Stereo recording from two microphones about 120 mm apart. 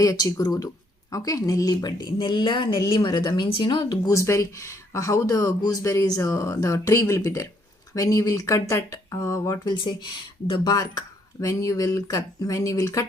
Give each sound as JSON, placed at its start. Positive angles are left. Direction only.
{"t": 0.0, "sound": "a woman's voice", "side_deg": 30}